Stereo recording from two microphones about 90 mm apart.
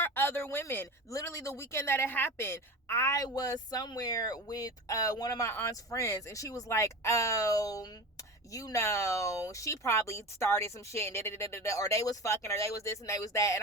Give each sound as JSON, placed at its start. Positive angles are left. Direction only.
{"t": 0.0, "sound": "speech", "side_deg": 25}
{"t": 1.1, "sound": "speech", "side_deg": 35}
{"t": 5.5, "sound": "speech", "side_deg": 30}